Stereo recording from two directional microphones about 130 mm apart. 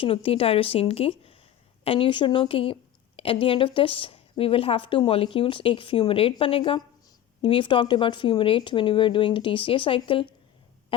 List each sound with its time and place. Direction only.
0.0 s a woman's voice: 45° left (ahead or behind)